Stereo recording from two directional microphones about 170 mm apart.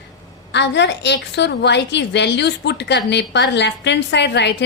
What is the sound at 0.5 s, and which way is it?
A woman's voice, 90° left.